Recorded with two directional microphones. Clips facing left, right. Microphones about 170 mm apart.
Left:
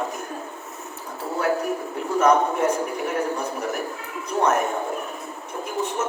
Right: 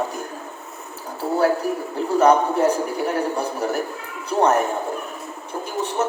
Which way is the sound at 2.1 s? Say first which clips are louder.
Right 3 dB; 35° right (ahead or behind).